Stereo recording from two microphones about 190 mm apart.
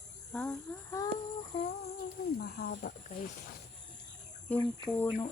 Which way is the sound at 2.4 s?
55° left (ahead or behind).